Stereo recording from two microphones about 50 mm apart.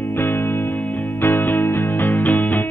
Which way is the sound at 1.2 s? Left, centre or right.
Left.